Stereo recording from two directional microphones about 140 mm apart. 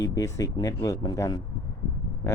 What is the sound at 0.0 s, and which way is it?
Speech, 25° left (ahead or behind).